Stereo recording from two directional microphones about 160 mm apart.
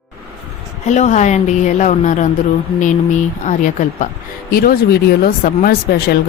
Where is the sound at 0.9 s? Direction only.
45° left (ahead or behind).